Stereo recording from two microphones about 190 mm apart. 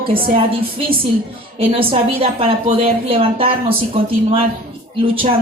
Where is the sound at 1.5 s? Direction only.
30° right (ahead or behind).